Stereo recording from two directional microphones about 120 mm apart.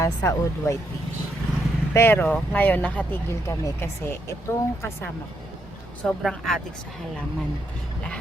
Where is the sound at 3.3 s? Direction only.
25° left (ahead or behind).